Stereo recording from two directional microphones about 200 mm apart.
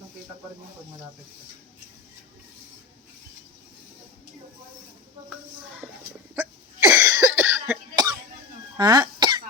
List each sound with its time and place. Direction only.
6.3 s cough: 15° right (ahead or behind)